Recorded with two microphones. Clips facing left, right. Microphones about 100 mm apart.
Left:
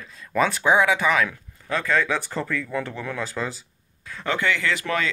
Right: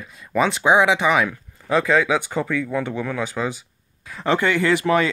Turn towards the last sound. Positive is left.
turn(degrees=-25)  # may be behind; listen again after turning